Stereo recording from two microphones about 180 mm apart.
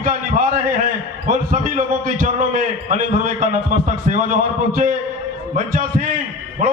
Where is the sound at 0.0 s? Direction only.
45° right (ahead or behind).